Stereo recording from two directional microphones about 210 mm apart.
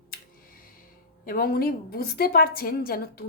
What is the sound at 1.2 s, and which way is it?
A woman's voice, 45° left (ahead or behind).